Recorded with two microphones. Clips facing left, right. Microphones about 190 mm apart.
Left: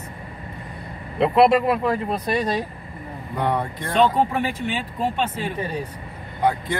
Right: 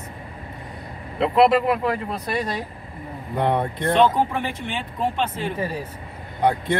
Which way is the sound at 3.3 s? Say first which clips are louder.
Right 2 dB; 25° right (ahead or behind).